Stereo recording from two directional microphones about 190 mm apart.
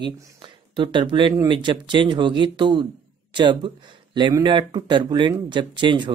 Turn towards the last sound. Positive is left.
turn(degrees=-25)  # may be behind; listen again after turning